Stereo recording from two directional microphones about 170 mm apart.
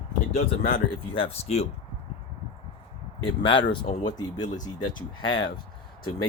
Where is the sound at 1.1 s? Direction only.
35° left (ahead or behind).